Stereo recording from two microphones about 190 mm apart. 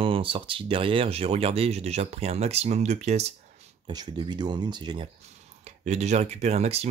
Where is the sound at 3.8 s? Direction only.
20° right (ahead or behind).